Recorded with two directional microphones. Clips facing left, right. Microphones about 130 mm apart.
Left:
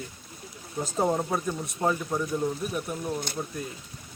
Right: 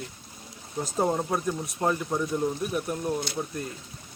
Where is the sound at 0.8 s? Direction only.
Centre (ahead or behind).